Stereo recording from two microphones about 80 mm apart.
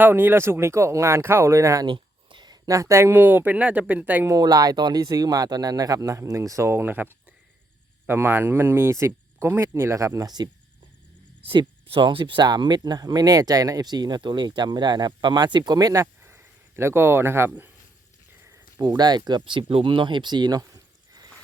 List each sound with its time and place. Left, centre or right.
0.0 s speech: right
1.9 s a sound: right
2.6 s speech: right; by 4.3 s centre
4.3 s speech: right
6.7 s speech: right
11.4 s speech: right
18.9 s speech: right